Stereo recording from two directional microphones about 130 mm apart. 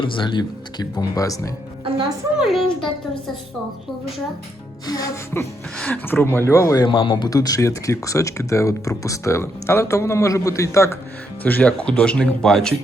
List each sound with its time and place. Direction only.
0.0 s speech: 35° left (ahead or behind)
1.8 s music: 35° right (ahead or behind)
2.4 s a child's voice: centre (ahead or behind)
4.9 s speech: 25° left (ahead or behind)
5.7 s a sound: 5° left (ahead or behind)
6.1 s speech: 15° left (ahead or behind)
6.8 s speech: 40° left (ahead or behind)
7.3 s speech: 25° left (ahead or behind); by 12.7 s 5° left (ahead or behind)